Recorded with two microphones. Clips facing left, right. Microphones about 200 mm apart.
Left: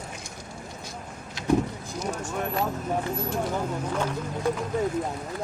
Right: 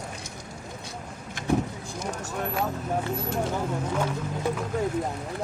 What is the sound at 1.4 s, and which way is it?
Vehicle, 50° right (ahead or behind).